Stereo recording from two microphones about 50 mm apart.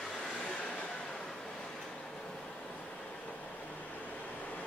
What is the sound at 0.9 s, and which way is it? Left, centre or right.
Train, centre.